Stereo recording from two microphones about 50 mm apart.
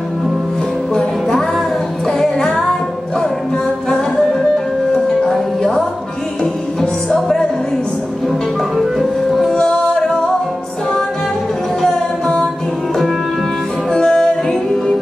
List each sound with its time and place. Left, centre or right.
0.9 s music: centre
3.9 s music: centre
8.7 s music: centre
9.5 s music: centre
11.9 s music: left
13.8 s music: centre